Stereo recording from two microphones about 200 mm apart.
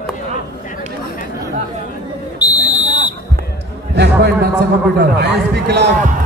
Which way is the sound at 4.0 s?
55° right (ahead or behind).